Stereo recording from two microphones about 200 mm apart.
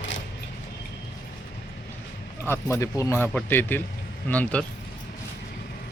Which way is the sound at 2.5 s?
15° left (ahead or behind).